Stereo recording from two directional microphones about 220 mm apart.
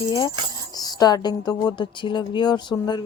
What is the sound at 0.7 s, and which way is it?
Speech, 15° left (ahead or behind).